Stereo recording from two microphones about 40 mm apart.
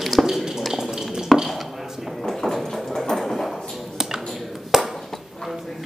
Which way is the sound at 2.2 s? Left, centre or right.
Centre.